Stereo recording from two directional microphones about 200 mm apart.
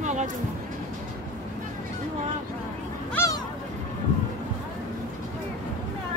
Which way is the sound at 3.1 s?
15° left (ahead or behind).